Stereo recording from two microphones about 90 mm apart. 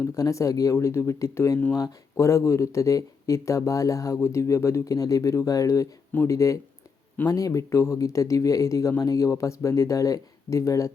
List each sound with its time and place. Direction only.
0.0 s speech: 35° left (ahead or behind)